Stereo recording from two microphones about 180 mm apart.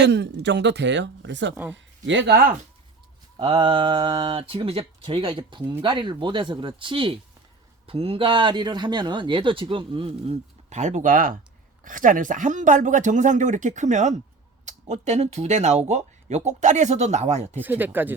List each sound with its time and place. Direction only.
0.0 s speech: 70° right (ahead or behind)
3.3 s a man's voice: 30° right (ahead or behind)
17.6 s speech: 10° right (ahead or behind)